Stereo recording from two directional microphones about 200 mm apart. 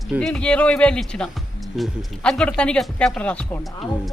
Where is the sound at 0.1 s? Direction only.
5° left (ahead or behind).